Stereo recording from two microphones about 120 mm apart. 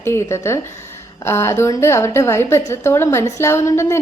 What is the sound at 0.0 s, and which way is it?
A woman's voice, 20° left (ahead or behind).